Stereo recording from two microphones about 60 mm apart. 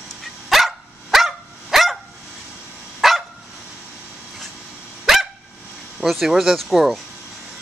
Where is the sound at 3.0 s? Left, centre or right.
Centre.